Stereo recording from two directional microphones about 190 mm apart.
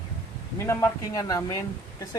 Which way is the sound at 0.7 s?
15° left (ahead or behind).